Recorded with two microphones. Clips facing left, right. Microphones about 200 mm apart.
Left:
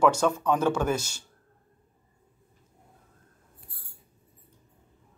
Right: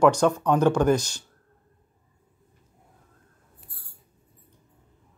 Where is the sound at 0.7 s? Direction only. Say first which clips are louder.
Right 6 dB; 5° left (ahead or behind).